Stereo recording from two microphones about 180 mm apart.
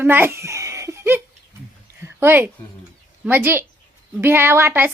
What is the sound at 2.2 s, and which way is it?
A woman's voice, 10° right (ahead or behind).